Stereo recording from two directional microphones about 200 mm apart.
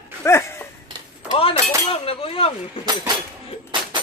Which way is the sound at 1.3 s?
30° left (ahead or behind).